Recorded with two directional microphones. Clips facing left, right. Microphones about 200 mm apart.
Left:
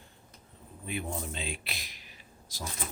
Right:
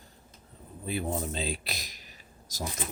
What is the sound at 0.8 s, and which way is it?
Speech, 35° right (ahead or behind).